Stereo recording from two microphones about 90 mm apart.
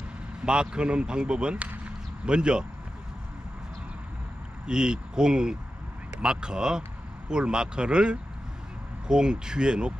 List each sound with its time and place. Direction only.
0.5 s speech: 10° right (ahead or behind)
4.6 s speech: 10° right (ahead or behind)